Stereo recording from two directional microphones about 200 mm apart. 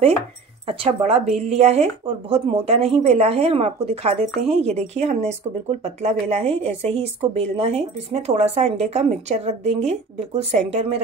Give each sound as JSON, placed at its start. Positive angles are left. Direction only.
{"t": 0.7, "sound": "speech", "side_deg": -30}